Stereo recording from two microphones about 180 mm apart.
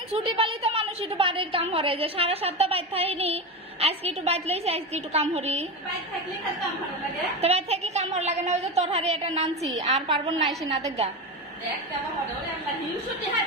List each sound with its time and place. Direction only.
0.1 s a woman's voice: 30° right (ahead or behind)
7.4 s a woman's voice: 35° right (ahead or behind)
10.0 s a woman's voice: 25° right (ahead or behind)